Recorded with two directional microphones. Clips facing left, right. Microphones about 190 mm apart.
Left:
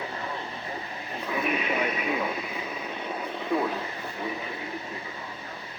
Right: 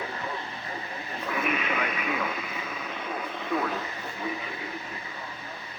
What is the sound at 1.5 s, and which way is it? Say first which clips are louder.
Radio: left 3 dB; 35° left (ahead or behind).